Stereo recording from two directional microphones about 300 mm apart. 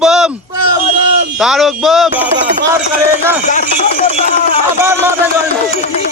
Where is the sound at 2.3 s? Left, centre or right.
Right.